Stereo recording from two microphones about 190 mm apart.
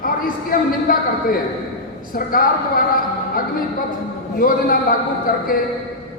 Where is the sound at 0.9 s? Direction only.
45° left (ahead or behind).